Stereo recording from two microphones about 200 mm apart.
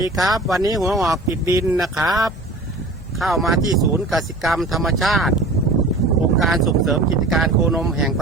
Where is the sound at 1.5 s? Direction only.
15° right (ahead or behind).